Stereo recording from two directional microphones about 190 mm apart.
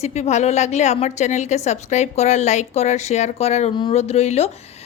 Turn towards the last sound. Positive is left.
turn(degrees=35)  # may be behind; listen again after turning